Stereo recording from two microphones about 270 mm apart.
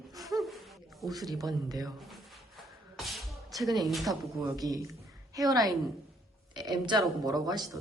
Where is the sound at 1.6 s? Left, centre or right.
Centre.